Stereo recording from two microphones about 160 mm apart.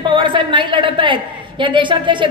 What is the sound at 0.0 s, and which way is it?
A woman's voice, 30° right (ahead or behind).